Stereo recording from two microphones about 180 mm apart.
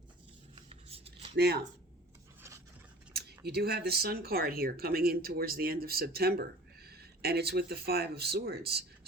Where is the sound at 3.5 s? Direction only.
65° right (ahead or behind).